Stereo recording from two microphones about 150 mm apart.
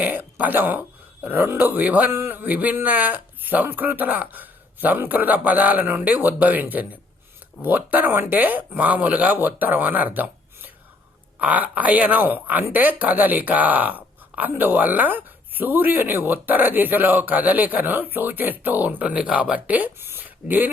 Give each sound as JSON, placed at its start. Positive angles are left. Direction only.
{"t": 0.0, "sound": "speech", "side_deg": -10}